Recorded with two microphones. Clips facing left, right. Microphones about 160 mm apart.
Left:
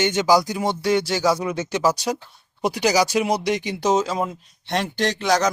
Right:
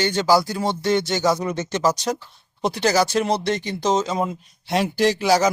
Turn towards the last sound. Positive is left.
turn(degrees=-5)  # may be behind; listen again after turning